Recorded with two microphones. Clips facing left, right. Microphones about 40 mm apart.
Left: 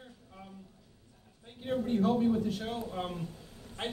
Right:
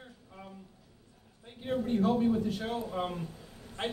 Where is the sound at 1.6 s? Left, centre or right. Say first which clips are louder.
Even; centre.